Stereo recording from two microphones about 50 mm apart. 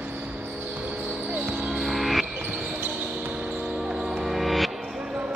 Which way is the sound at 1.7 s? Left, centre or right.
Centre.